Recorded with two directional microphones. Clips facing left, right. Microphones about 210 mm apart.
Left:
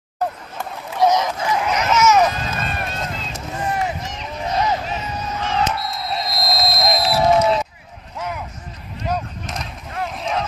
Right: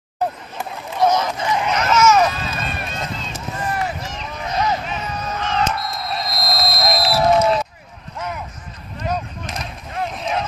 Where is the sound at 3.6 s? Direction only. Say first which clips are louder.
Left 1 dB; 20° left (ahead or behind).